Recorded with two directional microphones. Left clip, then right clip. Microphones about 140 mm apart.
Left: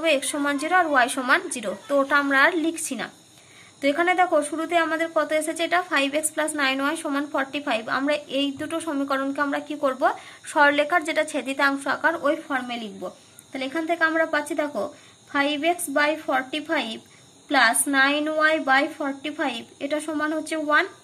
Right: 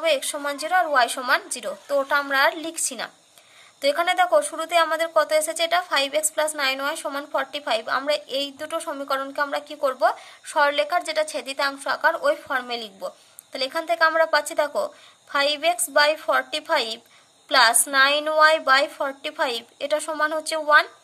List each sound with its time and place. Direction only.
0.0 s a woman's voice: 35° right (ahead or behind); by 20.8 s 60° right (ahead or behind)